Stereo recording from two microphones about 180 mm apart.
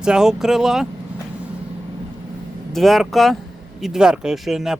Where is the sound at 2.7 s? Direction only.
Centre (ahead or behind).